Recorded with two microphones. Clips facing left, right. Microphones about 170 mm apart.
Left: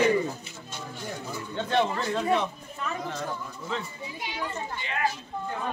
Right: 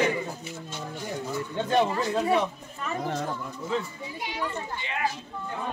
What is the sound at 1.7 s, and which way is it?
Speech, 10° right (ahead or behind).